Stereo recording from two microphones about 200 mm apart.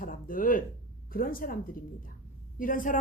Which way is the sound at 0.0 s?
45° left (ahead or behind).